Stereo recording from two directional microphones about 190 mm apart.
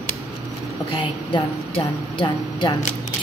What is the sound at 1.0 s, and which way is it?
A woman's voice, 25° left (ahead or behind).